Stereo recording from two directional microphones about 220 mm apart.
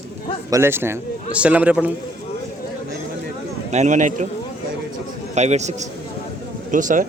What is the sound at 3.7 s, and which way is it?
Speech, 30° right (ahead or behind).